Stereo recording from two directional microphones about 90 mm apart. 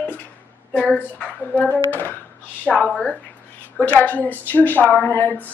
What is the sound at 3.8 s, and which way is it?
Speech, 20° left (ahead or behind).